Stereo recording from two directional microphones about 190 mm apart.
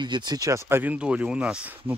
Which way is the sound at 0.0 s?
20° right (ahead or behind).